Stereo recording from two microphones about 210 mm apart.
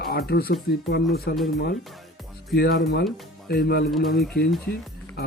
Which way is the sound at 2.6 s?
45° left (ahead or behind).